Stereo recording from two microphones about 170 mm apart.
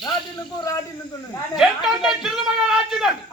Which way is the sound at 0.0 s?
20° left (ahead or behind).